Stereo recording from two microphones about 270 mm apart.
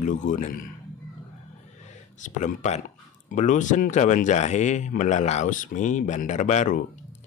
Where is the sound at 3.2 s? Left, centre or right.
Left.